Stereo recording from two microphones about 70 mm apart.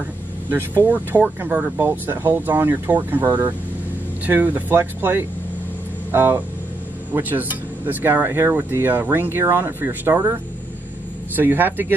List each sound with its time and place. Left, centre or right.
0.5 s speech: right